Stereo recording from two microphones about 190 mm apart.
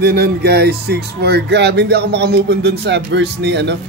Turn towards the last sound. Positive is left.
turn(degrees=-65)  # may be behind; listen again after turning